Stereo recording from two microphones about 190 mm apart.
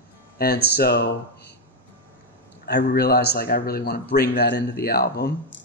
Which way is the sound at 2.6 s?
60° left (ahead or behind).